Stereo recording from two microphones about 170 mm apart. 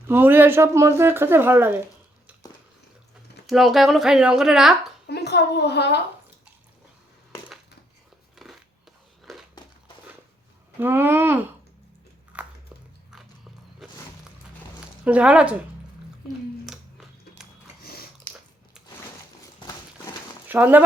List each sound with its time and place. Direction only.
0.1 s speech: 10° right (ahead or behind)
3.4 s a woman's voice: centre (ahead or behind)
5.0 s a woman's voice: 75° left (ahead or behind)
8.4 s a sound: centre (ahead or behind)
10.8 s speech: 15° right (ahead or behind)
12.3 s biting: 10° right (ahead or behind)
15.0 s speech: 10° right (ahead or behind)
16.6 s music: centre (ahead or behind)
20.5 s speech: 10° right (ahead or behind)